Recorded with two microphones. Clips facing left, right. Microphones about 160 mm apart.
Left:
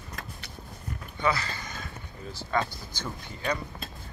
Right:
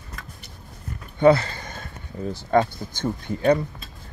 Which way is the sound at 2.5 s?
50° right (ahead or behind).